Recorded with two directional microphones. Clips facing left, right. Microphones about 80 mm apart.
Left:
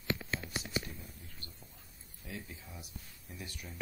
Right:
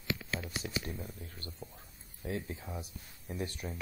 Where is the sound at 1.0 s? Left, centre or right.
Right.